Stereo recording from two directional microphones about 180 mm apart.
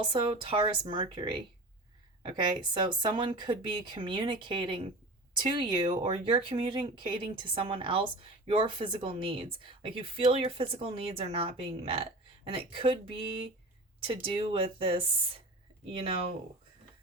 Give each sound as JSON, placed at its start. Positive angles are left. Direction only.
{"t": 0.0, "sound": "speech", "side_deg": -25}